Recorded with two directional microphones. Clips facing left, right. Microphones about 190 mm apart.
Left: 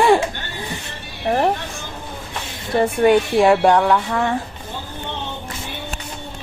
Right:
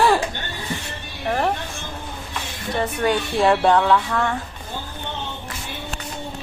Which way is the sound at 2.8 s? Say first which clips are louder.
Left 7 dB; 20° left (ahead or behind).